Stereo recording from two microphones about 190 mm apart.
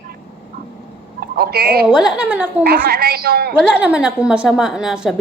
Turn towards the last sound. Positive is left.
turn(degrees=0)  # may be behind; listen again after turning